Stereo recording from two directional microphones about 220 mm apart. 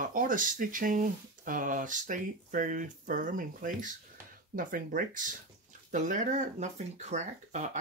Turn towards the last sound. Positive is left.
turn(degrees=-30)  # may be behind; listen again after turning